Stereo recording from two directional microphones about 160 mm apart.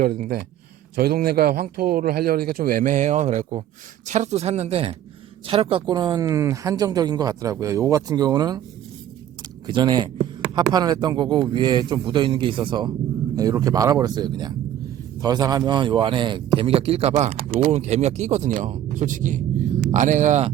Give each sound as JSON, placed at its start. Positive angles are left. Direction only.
{"t": 0.0, "sound": "a man's voice", "side_deg": -65}
{"t": 5.9, "sound": "speech", "side_deg": -25}
{"t": 9.6, "sound": "speech", "side_deg": -30}